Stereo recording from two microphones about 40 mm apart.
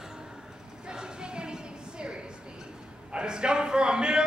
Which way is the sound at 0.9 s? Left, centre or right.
Centre.